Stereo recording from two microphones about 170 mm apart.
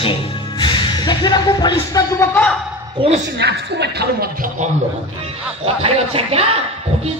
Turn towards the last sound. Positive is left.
turn(degrees=-35)  # may be behind; listen again after turning